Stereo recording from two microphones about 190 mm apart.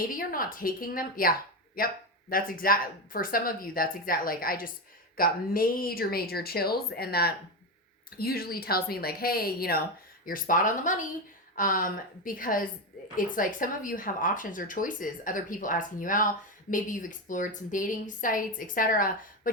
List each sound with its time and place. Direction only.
0.0 s speech: 50° left (ahead or behind)